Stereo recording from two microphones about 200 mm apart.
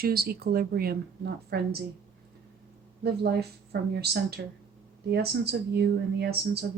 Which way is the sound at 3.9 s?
55° right (ahead or behind).